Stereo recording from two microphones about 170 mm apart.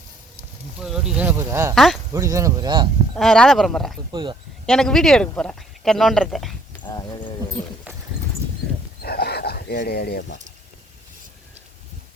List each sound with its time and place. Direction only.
0.8 s speech: 5° right (ahead or behind)
1.7 s speech: centre (ahead or behind)
2.1 s speech: 20° right (ahead or behind)
3.2 s speech: 5° left (ahead or behind)
4.1 s speech: 25° right (ahead or behind)
4.6 s speech: 5° left (ahead or behind)
6.8 s speech: 25° left (ahead or behind)
7.9 s clip-clop: 10° right (ahead or behind)
9.0 s dog: 65° left (ahead or behind)